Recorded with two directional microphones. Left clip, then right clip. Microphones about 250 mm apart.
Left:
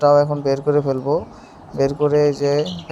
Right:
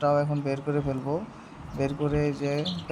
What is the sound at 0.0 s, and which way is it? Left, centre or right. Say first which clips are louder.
Speech: left 11 dB; centre.